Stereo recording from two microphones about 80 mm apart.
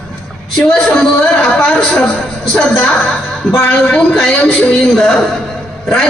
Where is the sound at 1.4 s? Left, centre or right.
Centre.